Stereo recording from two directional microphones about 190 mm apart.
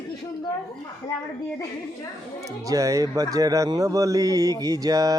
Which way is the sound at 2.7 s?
15° right (ahead or behind).